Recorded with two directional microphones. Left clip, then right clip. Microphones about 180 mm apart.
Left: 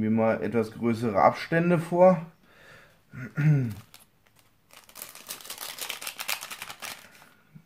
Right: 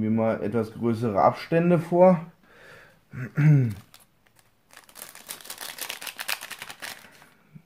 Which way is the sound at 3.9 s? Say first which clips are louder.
Even; 10° right (ahead or behind).